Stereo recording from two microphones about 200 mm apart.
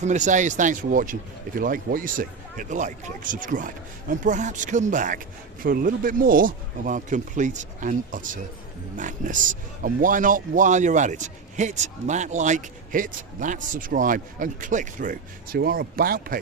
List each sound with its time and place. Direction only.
0.0 s a man's voice: 35° right (ahead or behind)